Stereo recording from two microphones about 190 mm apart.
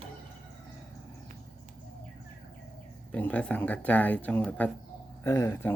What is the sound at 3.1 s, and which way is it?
Speech, 5° left (ahead or behind).